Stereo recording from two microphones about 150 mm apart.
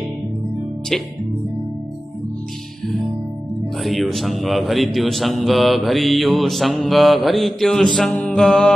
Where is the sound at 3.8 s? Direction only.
Centre (ahead or behind).